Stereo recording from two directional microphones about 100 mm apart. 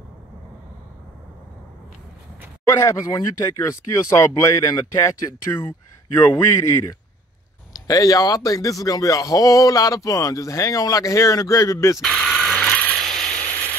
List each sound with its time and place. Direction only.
2.7 s speech: 30° left (ahead or behind)
6.1 s a man's voice: 25° left (ahead or behind)
12.0 s mechanisms: 5° left (ahead or behind)